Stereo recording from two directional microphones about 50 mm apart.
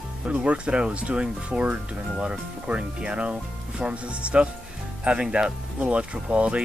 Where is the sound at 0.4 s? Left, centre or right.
Right.